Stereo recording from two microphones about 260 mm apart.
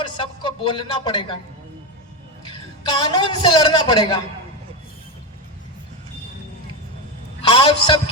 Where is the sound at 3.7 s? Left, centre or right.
Centre.